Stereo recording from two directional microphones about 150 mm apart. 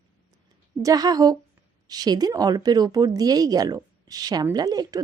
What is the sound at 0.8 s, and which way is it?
Speech, 25° right (ahead or behind).